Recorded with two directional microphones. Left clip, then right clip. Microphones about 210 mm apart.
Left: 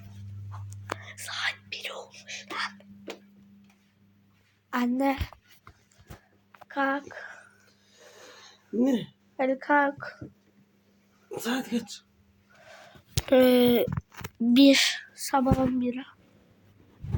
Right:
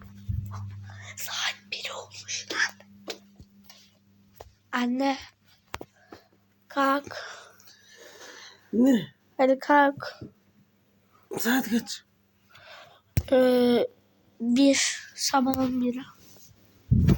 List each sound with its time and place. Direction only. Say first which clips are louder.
0.9 s whispering: right 2 dB; 5° right (ahead or behind)
4.7 s speech: even; 5° left (ahead or behind)
6.7 s speech: right 3 dB; 5° right (ahead or behind)
7.1 s whispering: right 3 dB; 15° right (ahead or behind)
7.9 s a sound: right 4 dB; 35° right (ahead or behind)
9.4 s a woman's voice: right 4 dB; 15° right (ahead or behind)
11.3 s speech: right 4 dB; 40° right (ahead or behind)
12.6 s a sound: right 1 dB; 5° left (ahead or behind)
14.4 s speech: left 3 dB; 15° left (ahead or behind)
15.3 s speech: even; 5° left (ahead or behind)